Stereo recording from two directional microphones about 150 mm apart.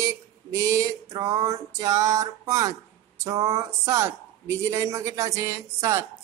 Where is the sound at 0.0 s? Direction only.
20° right (ahead or behind).